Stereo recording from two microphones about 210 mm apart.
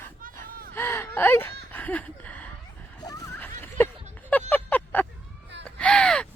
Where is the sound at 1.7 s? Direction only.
10° left (ahead or behind).